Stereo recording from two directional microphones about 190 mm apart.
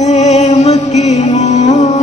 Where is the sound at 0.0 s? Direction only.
35° left (ahead or behind).